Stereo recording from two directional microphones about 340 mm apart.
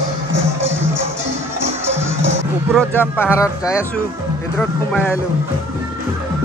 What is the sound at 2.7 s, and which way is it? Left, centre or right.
Speech, centre.